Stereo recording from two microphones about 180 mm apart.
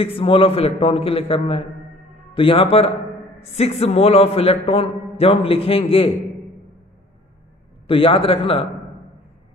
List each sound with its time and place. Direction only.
0.0 s a man's voice: 30° left (ahead or behind)
7.8 s a man's voice: 30° left (ahead or behind)